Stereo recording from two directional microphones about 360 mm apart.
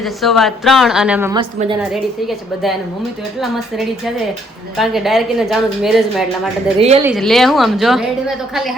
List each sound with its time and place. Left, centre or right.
0.0 s speech: centre
3.4 s speech: centre
6.7 s a woman's voice: centre
7.0 s speech: centre